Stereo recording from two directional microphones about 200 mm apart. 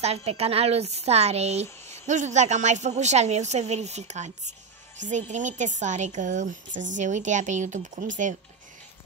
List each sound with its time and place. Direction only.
0.0 s a woman's voice: 30° right (ahead or behind)